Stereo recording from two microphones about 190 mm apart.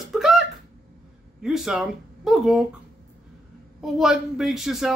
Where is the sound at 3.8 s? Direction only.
Centre (ahead or behind).